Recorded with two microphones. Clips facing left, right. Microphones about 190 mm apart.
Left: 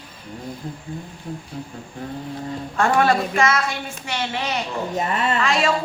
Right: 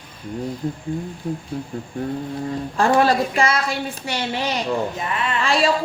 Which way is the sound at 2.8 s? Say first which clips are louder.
Right 1 dB; 30° right (ahead or behind).